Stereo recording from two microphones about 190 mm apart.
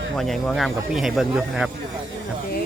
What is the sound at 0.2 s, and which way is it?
Speech, centre (ahead or behind).